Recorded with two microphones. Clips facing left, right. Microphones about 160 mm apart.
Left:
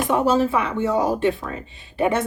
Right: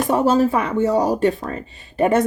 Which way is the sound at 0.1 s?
40° right (ahead or behind).